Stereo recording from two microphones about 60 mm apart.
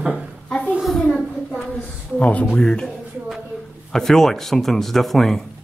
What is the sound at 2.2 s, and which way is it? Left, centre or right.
Speech, left.